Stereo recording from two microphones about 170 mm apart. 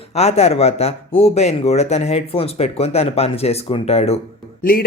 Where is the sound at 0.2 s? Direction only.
40° left (ahead or behind).